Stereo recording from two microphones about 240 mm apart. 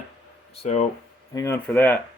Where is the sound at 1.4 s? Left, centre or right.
Centre.